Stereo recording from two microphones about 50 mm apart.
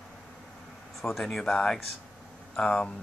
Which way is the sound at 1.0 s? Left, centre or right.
Centre.